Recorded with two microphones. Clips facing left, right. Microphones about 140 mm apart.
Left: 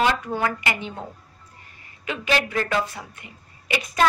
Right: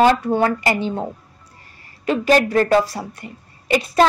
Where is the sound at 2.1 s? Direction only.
40° right (ahead or behind).